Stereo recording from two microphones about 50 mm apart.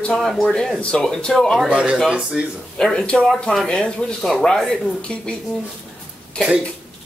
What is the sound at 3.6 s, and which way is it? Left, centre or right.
Speech, centre.